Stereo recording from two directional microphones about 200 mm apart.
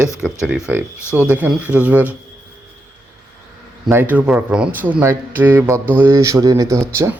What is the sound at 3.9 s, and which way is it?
Speech, 10° right (ahead or behind).